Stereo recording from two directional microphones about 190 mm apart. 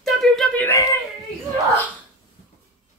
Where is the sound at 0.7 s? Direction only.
15° left (ahead or behind).